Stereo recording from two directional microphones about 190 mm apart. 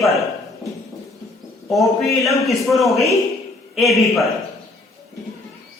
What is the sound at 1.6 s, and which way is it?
Speech, centre (ahead or behind).